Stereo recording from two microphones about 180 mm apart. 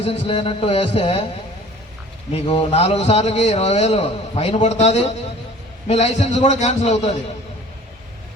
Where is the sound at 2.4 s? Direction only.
35° left (ahead or behind).